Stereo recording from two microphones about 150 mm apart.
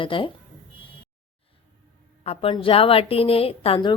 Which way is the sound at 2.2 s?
40° left (ahead or behind).